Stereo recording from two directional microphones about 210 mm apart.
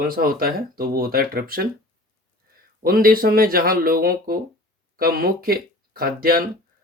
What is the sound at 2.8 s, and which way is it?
Speech, 45° right (ahead or behind).